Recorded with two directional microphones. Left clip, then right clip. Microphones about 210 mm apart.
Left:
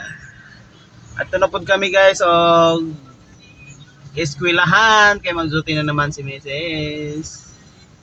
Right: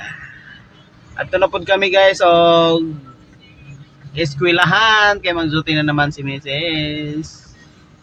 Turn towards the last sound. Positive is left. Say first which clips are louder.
# right 3 dB
turn(degrees=-20)  # may be behind; listen again after turning